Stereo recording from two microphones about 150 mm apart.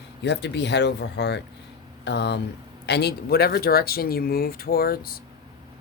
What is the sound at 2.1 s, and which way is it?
Speech, 90° left.